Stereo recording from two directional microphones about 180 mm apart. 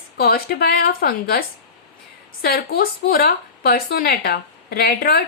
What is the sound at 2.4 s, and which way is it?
Speech, 60° left (ahead or behind).